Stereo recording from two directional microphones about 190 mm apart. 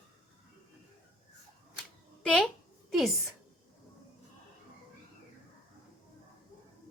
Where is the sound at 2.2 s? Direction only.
5° left (ahead or behind).